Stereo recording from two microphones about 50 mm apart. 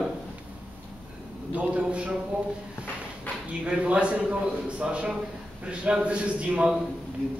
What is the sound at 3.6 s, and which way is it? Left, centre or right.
A man's voice, right.